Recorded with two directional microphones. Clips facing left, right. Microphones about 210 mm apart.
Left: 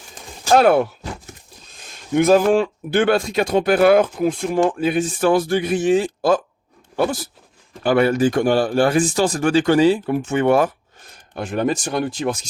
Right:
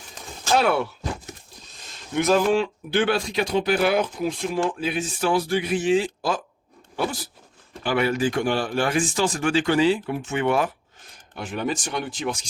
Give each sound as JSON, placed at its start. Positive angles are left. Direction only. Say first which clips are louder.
{"t": 0.5, "sound": "speech", "louder": "left 7 dB", "side_deg": 50}
{"t": 2.1, "sound": "speech", "louder": "left 5 dB", "side_deg": 50}